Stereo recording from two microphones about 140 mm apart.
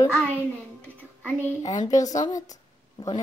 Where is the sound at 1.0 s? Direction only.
10° left (ahead or behind).